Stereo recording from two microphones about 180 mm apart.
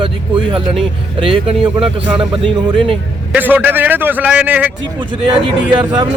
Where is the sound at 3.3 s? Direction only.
10° right (ahead or behind).